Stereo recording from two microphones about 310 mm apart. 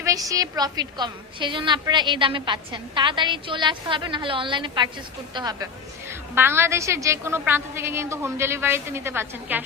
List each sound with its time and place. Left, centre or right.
0.0 s a woman's voice: centre